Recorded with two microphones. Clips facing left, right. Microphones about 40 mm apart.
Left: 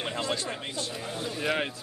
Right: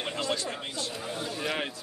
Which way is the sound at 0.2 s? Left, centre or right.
Centre.